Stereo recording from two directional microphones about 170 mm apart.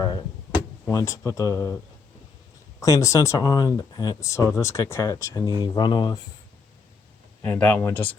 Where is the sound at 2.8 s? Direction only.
20° left (ahead or behind).